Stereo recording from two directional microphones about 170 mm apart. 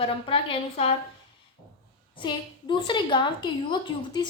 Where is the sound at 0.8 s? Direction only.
35° left (ahead or behind).